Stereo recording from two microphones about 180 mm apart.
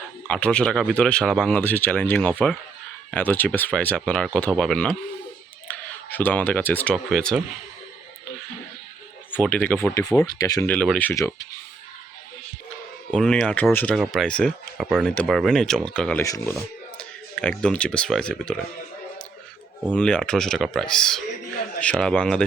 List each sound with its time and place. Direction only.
0.3 s speech: 5° left (ahead or behind)
9.3 s speech: 10° left (ahead or behind)
10.7 s speech: 5° left (ahead or behind)
11.1 s speech: 20° left (ahead or behind)
13.1 s speech: 5° left (ahead or behind)
16.2 s speech: 20° left (ahead or behind)
16.6 s speech: 5° left (ahead or behind)
19.9 s speech: 5° left (ahead or behind)